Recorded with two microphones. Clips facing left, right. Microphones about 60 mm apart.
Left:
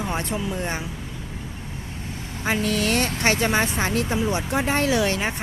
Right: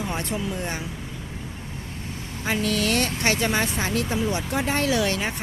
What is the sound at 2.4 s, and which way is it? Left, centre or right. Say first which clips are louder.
Speech: left 1 dB; left.